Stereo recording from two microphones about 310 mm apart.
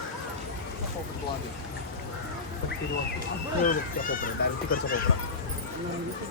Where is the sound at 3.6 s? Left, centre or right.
Left.